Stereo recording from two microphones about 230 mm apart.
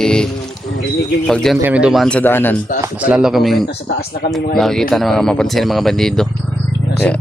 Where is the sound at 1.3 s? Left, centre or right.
Centre.